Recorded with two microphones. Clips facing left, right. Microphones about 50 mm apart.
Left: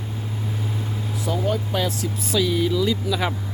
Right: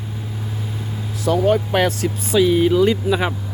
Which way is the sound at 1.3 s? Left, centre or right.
Right.